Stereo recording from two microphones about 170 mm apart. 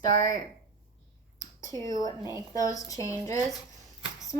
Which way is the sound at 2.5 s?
20° left (ahead or behind).